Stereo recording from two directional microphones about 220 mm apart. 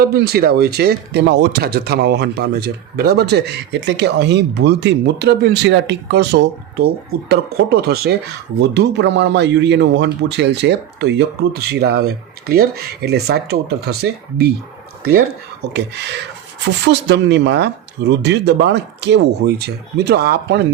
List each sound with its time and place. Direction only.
0.0 s speech: 45° right (ahead or behind)
16.6 s speech: 50° right (ahead or behind)